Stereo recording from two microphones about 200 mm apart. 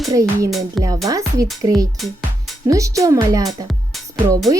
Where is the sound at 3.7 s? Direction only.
Centre (ahead or behind).